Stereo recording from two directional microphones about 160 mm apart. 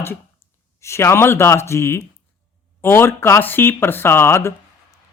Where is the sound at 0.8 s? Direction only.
15° left (ahead or behind).